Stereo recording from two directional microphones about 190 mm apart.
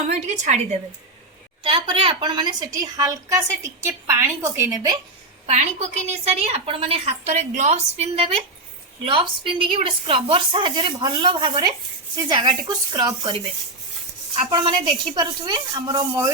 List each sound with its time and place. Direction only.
0.1 s a woman's voice: 35° right (ahead or behind)
1.6 s a woman's voice: 25° right (ahead or behind)
5.5 s a woman's voice: 35° right (ahead or behind)
14.5 s a woman's voice: 25° right (ahead or behind)